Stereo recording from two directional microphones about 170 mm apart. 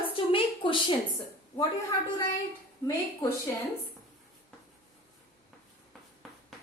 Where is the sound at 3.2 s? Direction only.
25° left (ahead or behind).